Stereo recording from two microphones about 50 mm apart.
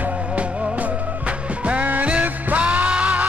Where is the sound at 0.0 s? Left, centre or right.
Right.